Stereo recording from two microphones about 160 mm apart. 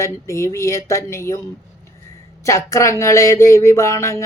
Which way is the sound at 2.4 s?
20° left (ahead or behind).